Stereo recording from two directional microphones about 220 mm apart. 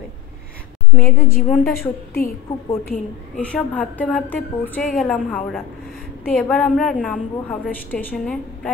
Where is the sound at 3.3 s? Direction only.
5° left (ahead or behind).